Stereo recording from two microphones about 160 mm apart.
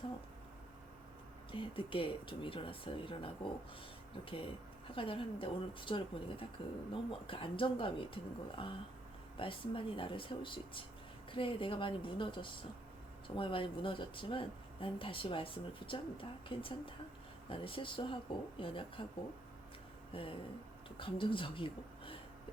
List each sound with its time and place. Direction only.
1.5 s speech: 35° left (ahead or behind)
4.3 s speech: 35° left (ahead or behind)
20.1 s speech: 35° left (ahead or behind)